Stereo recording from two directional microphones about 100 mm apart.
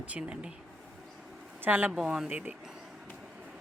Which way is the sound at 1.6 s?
20° right (ahead or behind).